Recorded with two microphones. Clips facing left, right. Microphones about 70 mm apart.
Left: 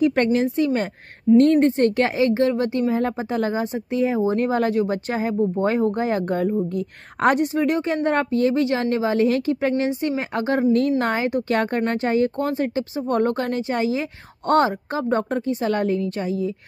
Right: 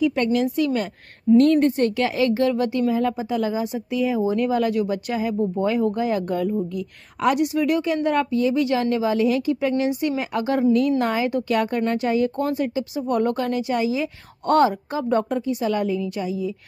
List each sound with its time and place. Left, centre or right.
0.0 s a woman's voice: left
11.2 s a woman's voice: left
11.5 s a woman's voice: left